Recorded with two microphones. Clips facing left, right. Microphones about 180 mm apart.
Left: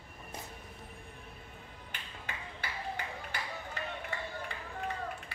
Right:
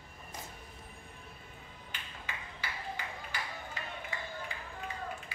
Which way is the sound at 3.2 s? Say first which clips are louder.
Left 1 dB; 60° left (ahead or behind).